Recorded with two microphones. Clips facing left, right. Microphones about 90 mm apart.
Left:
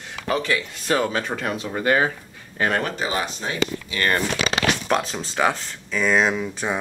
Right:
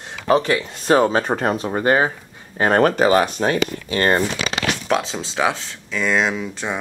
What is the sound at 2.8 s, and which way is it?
Speech, 60° right (ahead or behind).